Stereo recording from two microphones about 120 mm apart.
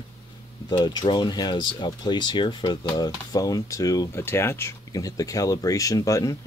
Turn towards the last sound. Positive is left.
turn(degrees=25)  # may be behind; listen again after turning